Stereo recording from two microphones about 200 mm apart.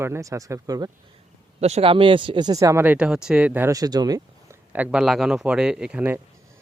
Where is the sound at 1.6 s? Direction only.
30° right (ahead or behind).